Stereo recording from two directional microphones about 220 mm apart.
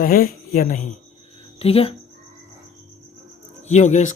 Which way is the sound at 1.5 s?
25° left (ahead or behind).